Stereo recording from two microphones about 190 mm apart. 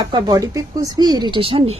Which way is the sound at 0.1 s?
20° right (ahead or behind).